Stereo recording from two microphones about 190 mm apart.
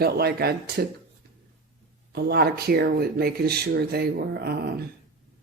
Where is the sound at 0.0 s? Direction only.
55° right (ahead or behind).